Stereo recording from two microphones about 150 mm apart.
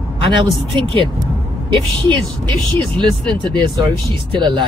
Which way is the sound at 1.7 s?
35° right (ahead or behind).